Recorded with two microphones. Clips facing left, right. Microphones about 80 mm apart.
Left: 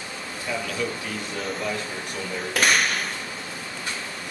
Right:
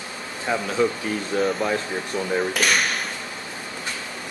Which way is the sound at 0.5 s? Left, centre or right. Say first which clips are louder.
Right 7 dB; right.